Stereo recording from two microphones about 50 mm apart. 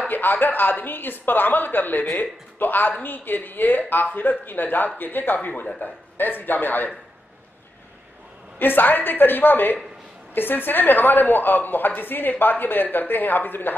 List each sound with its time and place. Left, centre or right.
0.1 s a woman's voice: left
8.5 s a woman's voice: left